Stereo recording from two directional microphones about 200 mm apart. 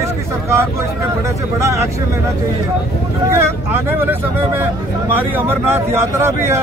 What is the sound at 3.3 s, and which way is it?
Speech, 10° right (ahead or behind).